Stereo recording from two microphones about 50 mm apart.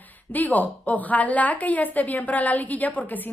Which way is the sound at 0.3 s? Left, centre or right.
Left.